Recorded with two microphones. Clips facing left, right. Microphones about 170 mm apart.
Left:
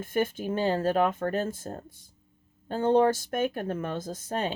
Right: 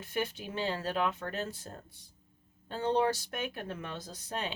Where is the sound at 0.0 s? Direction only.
50° left (ahead or behind).